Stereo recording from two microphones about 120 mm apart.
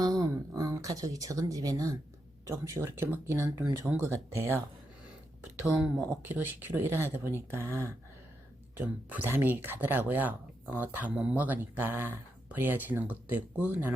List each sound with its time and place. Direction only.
0.0 s a sound: 30° right (ahead or behind)
2.5 s speech: 25° right (ahead or behind)
5.6 s speech: 10° right (ahead or behind)